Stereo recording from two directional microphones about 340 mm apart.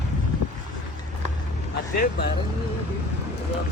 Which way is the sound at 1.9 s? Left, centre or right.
Left.